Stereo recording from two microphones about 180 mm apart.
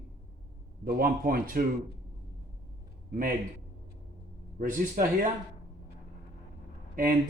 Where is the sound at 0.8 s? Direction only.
55° right (ahead or behind).